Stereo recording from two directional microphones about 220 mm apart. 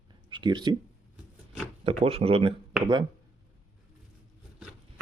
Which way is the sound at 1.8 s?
25° right (ahead or behind).